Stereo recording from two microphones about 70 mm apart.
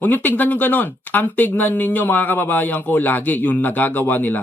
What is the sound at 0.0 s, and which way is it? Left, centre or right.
Speech, left.